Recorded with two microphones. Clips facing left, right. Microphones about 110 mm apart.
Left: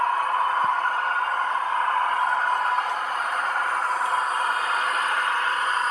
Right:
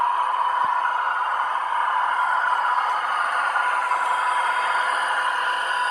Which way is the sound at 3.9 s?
90° right.